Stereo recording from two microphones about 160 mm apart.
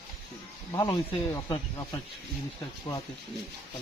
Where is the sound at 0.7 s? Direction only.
25° left (ahead or behind).